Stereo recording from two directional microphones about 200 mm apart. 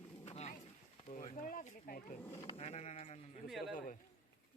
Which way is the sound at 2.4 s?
30° left (ahead or behind).